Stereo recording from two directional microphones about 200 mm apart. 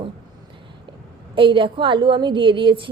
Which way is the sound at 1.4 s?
25° right (ahead or behind).